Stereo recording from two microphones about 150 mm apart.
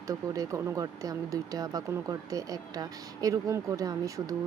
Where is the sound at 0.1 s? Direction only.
25° right (ahead or behind).